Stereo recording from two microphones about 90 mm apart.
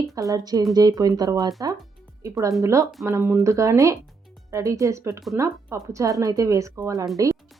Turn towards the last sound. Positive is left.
turn(degrees=-40)  # may be behind; listen again after turning